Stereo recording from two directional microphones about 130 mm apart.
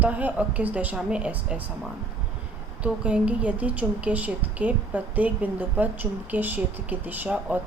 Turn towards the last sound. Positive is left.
turn(degrees=-10)  # may be behind; listen again after turning